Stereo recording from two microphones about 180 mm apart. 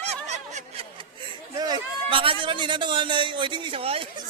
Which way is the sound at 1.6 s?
25° right (ahead or behind).